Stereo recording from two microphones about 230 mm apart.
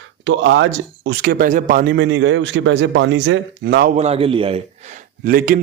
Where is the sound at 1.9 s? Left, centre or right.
Right.